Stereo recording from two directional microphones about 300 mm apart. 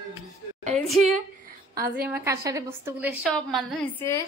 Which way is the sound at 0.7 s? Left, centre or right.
Centre.